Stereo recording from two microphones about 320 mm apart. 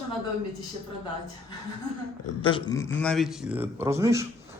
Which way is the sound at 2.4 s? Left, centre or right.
Centre.